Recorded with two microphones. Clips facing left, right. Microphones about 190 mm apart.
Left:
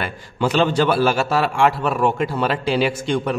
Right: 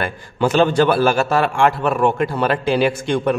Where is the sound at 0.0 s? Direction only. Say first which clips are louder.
Right 3 dB; 50° right (ahead or behind).